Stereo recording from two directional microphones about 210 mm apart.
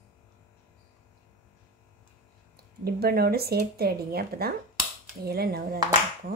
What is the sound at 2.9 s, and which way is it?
Speech, 45° right (ahead or behind).